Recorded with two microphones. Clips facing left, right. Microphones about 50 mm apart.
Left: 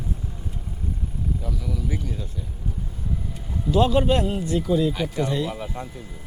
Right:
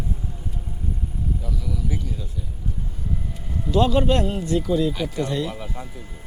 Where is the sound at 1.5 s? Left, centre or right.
Centre.